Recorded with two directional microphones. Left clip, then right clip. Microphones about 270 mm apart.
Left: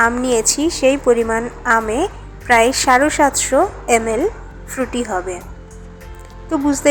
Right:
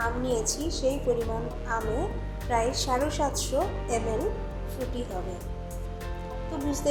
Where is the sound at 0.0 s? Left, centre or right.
Left.